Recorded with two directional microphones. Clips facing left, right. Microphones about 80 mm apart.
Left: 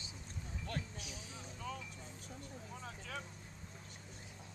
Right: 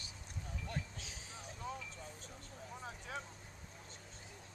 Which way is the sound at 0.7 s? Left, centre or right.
Centre.